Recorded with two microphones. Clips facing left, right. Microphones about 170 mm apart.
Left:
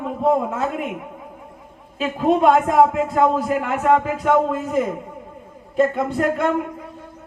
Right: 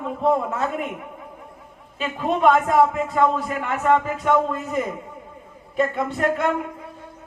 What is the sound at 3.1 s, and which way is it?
A man's voice, 5° left (ahead or behind).